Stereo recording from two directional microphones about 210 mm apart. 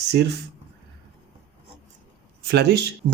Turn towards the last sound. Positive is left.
turn(degrees=-50)  # may be behind; listen again after turning